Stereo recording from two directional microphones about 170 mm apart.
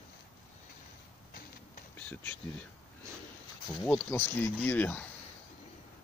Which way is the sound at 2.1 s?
10° left (ahead or behind).